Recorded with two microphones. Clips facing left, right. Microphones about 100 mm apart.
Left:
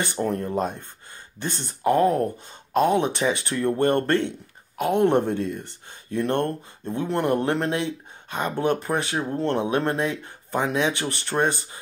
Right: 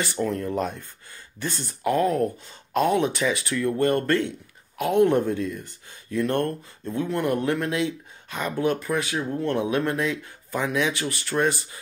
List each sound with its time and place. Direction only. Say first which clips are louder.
0.0 s speech: left 1 dB; 20° left (ahead or behind)